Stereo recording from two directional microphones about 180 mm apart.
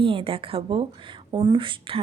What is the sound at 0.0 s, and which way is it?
A woman's voice, 30° right (ahead or behind).